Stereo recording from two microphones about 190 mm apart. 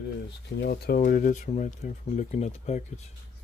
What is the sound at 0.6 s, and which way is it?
Speech, 55° left (ahead or behind).